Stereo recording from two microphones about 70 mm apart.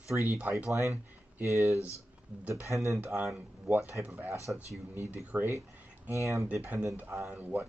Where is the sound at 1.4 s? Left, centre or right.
Right.